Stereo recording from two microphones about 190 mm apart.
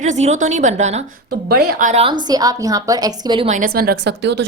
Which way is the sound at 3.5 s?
45° right (ahead or behind).